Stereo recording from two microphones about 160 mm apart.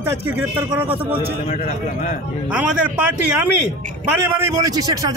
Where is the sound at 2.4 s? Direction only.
5° right (ahead or behind).